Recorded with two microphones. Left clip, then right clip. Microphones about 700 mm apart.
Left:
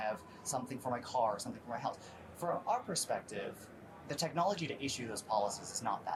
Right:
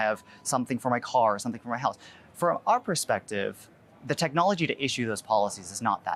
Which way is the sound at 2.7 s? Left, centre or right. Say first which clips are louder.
Right 11 dB; right.